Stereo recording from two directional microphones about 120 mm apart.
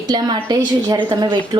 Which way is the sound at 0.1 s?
35° right (ahead or behind).